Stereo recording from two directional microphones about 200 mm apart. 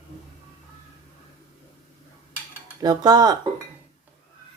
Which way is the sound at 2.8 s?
20° right (ahead or behind).